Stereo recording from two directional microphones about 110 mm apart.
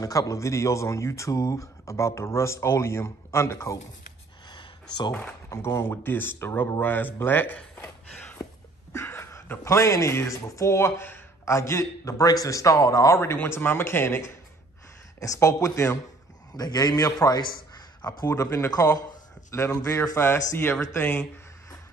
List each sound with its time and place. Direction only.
0.0 s speech: 30° left (ahead or behind)
4.5 s a sound: 40° left (ahead or behind)
5.1 s a man's voice: 20° left (ahead or behind)